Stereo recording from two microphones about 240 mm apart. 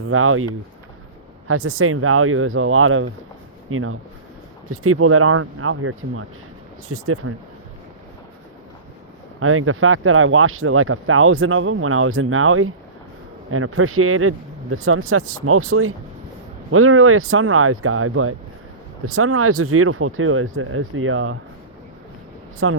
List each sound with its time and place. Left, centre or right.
0.0 s speech: right
9.4 s speech: right
22.6 s speech: right